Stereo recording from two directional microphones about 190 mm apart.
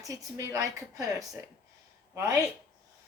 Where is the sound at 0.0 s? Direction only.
20° right (ahead or behind).